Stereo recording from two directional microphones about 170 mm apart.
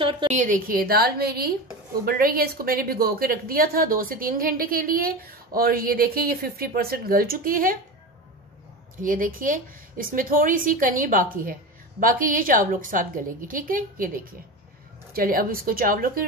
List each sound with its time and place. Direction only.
0.0 s a woman's voice: 30° right (ahead or behind)
0.3 s a woman's voice: 50° right (ahead or behind)
9.0 s a woman's voice: 55° right (ahead or behind)